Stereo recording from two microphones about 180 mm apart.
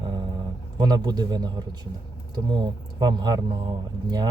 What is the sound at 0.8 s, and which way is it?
Speech, 20° right (ahead or behind).